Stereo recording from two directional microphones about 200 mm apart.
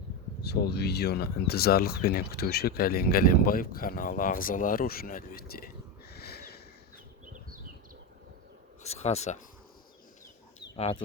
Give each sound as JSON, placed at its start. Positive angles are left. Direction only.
{"t": 0.4, "sound": "speech", "side_deg": 55}
{"t": 8.8, "sound": "speech", "side_deg": 35}
{"t": 10.8, "sound": "speech", "side_deg": 30}